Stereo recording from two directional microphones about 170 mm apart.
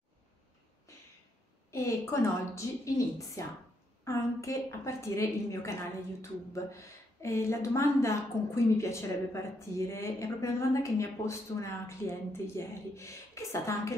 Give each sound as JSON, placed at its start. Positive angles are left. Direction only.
{"t": 1.7, "sound": "a woman's voice", "side_deg": 15}